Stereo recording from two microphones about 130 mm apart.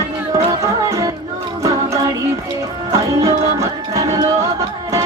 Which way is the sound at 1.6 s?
25° right (ahead or behind).